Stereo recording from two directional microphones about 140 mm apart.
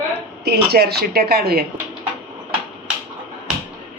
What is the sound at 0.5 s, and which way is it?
Speech, 90° right.